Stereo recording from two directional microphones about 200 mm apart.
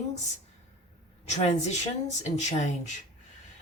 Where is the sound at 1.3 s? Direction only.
35° left (ahead or behind).